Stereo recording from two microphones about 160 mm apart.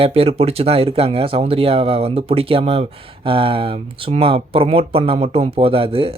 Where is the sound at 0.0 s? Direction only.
35° right (ahead or behind).